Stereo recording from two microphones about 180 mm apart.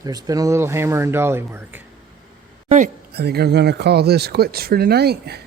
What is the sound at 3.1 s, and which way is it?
Speech, 65° right (ahead or behind).